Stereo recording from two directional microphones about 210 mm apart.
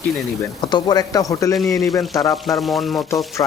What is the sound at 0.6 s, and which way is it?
Speech, 20° left (ahead or behind).